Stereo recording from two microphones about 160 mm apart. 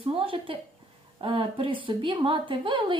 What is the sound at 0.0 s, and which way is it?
Speech, 35° right (ahead or behind).